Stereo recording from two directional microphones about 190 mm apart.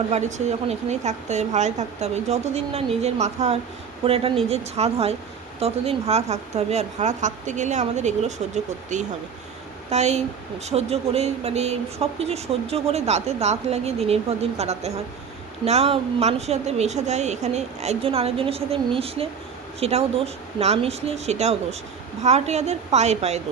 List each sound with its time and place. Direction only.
0.1 s speech: 40° right (ahead or behind)